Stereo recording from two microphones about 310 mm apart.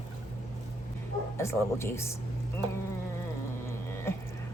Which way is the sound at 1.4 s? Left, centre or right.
Centre.